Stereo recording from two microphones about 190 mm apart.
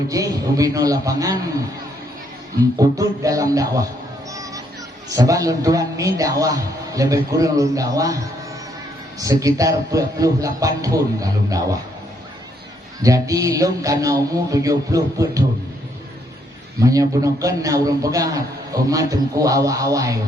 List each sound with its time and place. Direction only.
0.1 s a man's voice: 20° right (ahead or behind)
2.7 s speech: 20° right (ahead or behind)
5.0 s a man's voice: 20° right (ahead or behind)
13.0 s a man's voice: 20° right (ahead or behind)
16.8 s a man's voice: 15° right (ahead or behind)